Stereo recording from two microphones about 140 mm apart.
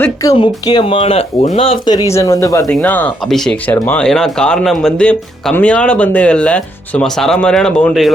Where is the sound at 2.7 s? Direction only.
10° left (ahead or behind).